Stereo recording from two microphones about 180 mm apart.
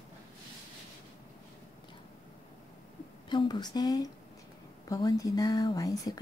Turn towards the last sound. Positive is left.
turn(degrees=20)  # may be behind; listen again after turning